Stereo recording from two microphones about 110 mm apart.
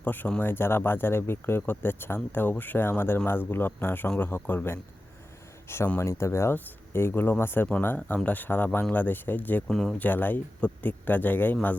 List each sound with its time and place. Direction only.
0.0 s speech: 15° left (ahead or behind)
10.1 s speech: 15° left (ahead or behind)